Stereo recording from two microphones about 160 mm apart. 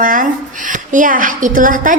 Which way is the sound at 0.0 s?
55° right (ahead or behind).